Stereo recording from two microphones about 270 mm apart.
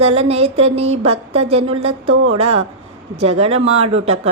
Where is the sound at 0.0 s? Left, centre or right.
Right.